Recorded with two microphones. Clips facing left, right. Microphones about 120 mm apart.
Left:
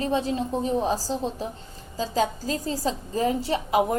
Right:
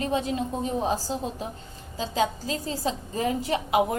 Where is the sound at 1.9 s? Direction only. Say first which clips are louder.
Left 1 dB; 40° left (ahead or behind).